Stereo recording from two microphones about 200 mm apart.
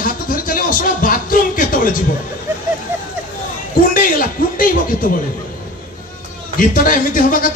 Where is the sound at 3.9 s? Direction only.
45° left (ahead or behind).